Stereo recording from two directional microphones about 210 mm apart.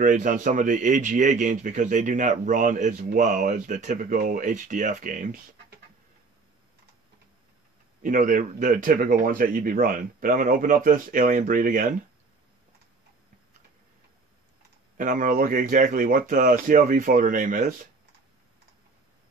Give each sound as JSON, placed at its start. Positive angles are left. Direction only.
{"t": 0.0, "sound": "speech", "side_deg": -40}
{"t": 8.0, "sound": "speech", "side_deg": -40}
{"t": 15.0, "sound": "speech", "side_deg": -40}